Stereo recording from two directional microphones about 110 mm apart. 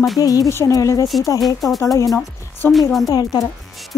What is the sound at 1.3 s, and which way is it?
Speech, centre (ahead or behind).